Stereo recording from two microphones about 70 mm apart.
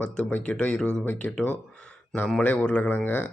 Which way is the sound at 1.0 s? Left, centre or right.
Left.